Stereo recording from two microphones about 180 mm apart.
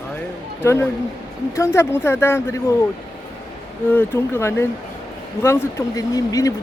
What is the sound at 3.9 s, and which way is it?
Speech, 10° left (ahead or behind).